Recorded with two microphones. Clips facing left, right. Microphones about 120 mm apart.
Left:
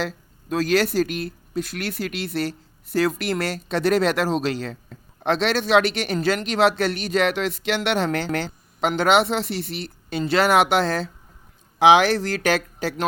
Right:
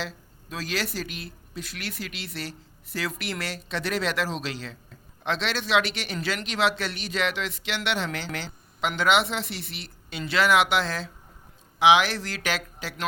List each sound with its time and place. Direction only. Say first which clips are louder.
0.5 s speech: left 11 dB; 50° left (ahead or behind)